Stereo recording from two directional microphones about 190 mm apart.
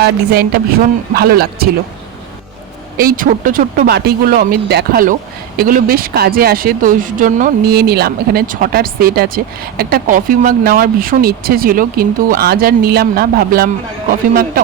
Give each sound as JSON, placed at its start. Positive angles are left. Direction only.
{"t": 0.0, "sound": "speech", "side_deg": -55}
{"t": 3.0, "sound": "speech", "side_deg": -50}